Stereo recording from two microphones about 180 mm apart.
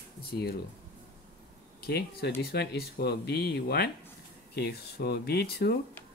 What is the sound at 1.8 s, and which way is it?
Speech, 65° left (ahead or behind).